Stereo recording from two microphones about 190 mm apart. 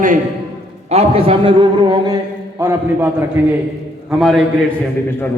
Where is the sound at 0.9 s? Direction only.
30° right (ahead or behind).